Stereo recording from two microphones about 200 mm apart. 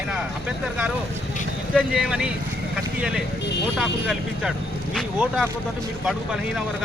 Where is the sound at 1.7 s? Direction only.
5° right (ahead or behind).